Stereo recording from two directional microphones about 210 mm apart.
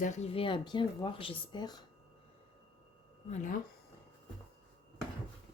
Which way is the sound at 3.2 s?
35° left (ahead or behind).